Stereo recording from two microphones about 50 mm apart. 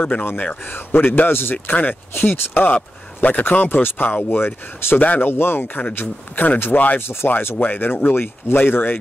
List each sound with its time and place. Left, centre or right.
0.0 s speech: left
0.7 s speech: left
1.3 s speech: left
1.7 s speech: left
2.3 s speech: left
2.6 s speech: left
5.3 s speech: left
7.0 s speech: left
7.5 s speech: left